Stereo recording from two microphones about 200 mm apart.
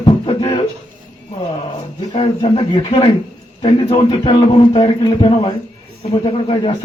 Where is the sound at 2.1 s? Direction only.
25° left (ahead or behind).